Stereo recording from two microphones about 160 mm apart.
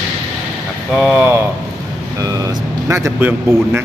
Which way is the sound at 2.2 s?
20° right (ahead or behind).